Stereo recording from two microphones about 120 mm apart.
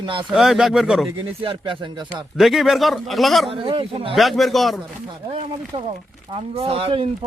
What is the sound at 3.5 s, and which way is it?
Speech, 50° right (ahead or behind).